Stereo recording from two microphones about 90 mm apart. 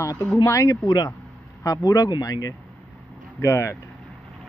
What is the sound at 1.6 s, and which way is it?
Speech, 40° left (ahead or behind).